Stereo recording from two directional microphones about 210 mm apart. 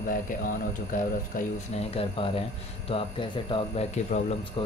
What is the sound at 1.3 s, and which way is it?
Speech, 40° left (ahead or behind).